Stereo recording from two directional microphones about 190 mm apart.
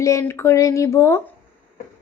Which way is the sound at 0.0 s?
15° left (ahead or behind).